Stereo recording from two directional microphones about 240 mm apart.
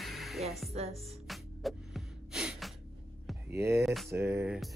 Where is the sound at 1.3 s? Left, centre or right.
Centre.